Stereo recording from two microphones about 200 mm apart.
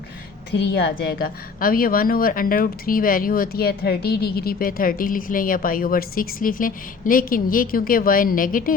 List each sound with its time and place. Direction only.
0.5 s a woman's voice: 55° left (ahead or behind)